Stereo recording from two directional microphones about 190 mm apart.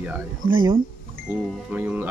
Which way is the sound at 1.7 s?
10° right (ahead or behind).